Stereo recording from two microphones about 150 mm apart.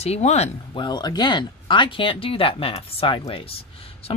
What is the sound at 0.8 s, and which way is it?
A woman's voice, 30° left (ahead or behind).